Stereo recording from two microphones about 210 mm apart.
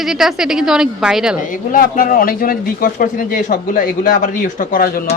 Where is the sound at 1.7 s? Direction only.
40° left (ahead or behind).